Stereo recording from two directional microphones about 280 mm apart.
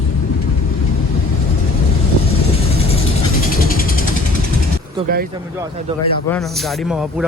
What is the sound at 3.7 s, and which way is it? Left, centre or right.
Vehicle, left.